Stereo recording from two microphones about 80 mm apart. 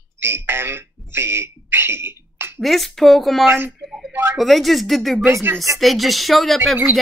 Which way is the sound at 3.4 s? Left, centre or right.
Right.